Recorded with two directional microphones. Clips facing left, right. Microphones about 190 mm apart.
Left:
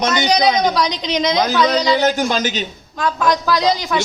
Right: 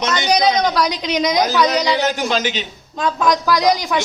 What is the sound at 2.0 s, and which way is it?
Speech, 50° left (ahead or behind).